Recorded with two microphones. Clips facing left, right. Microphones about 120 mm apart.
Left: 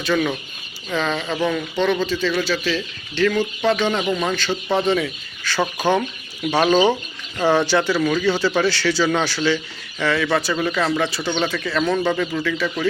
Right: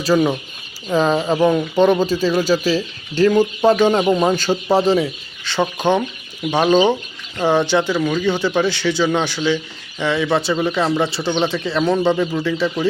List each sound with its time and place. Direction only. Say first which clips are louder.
0.1 s speech: right 5 dB; 25° right (ahead or behind)
0.9 s speech: right 7 dB; 35° right (ahead or behind)